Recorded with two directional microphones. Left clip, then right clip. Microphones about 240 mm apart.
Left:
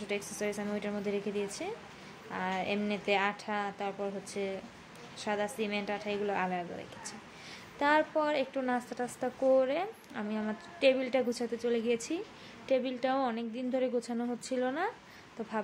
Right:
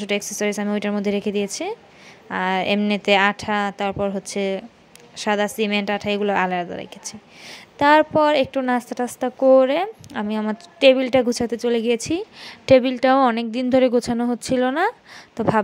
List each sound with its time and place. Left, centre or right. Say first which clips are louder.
0.0 s a woman's voice: right 12 dB; right